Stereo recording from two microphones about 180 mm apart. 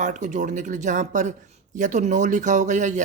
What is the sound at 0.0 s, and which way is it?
A woman's voice, 40° right (ahead or behind).